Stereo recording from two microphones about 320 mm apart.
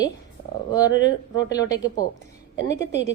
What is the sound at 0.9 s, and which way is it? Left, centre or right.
Speech, left.